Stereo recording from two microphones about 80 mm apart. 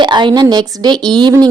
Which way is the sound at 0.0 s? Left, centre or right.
Right.